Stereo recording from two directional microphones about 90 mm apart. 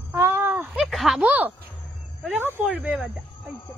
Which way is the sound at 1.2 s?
15° right (ahead or behind).